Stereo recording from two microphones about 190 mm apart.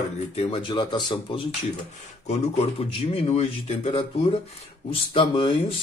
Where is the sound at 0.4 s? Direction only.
25° left (ahead or behind).